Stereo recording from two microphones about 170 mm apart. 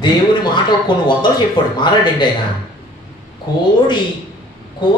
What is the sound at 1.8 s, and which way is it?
Speech, 25° left (ahead or behind).